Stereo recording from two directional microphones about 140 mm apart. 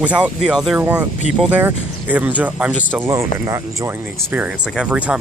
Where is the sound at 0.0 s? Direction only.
10° right (ahead or behind).